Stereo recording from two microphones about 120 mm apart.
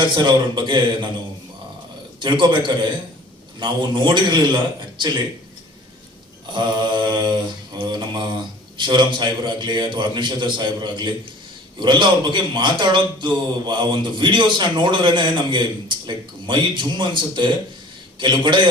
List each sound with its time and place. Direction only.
0.0 s a man's voice: 40° right (ahead or behind)
2.2 s a man's voice: 40° right (ahead or behind)
6.5 s mantra: 40° right (ahead or behind)
8.8 s a man's voice: 40° right (ahead or behind)